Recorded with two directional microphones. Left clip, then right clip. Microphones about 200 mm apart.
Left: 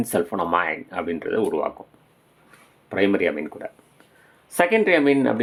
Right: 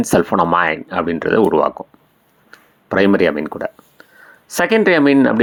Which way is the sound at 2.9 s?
30° right (ahead or behind).